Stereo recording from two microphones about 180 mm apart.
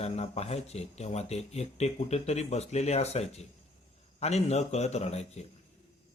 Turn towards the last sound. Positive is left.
turn(degrees=35)  # may be behind; listen again after turning